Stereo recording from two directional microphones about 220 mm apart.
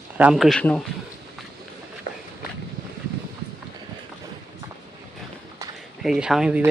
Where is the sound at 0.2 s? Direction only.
5° right (ahead or behind).